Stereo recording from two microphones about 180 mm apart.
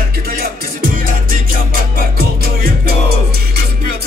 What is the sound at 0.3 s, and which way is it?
Music, 55° right (ahead or behind).